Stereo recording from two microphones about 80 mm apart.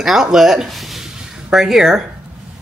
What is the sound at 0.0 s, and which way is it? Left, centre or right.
Speech, centre.